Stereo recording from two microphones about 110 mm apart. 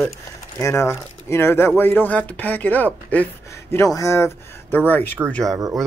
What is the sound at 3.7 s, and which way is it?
Speech, 30° left (ahead or behind).